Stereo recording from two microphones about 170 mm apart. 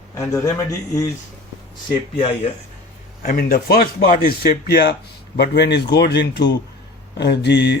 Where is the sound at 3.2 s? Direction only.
60° left (ahead or behind).